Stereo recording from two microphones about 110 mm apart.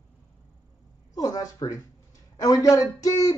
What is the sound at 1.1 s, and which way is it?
Speech, 35° left (ahead or behind).